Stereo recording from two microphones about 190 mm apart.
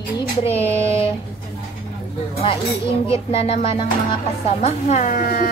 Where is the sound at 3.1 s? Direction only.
30° left (ahead or behind); by 5.5 s 50° left (ahead or behind).